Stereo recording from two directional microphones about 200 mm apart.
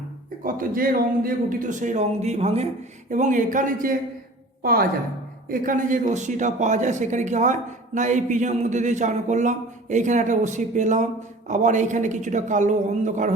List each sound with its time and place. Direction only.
0.4 s a man's voice: 45° right (ahead or behind)